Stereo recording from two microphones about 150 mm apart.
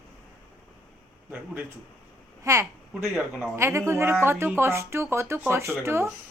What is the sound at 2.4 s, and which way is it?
Speech, 20° right (ahead or behind).